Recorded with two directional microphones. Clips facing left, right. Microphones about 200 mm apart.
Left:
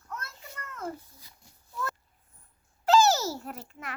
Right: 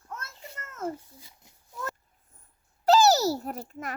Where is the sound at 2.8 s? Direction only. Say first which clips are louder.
Right 2 dB; 35° right (ahead or behind).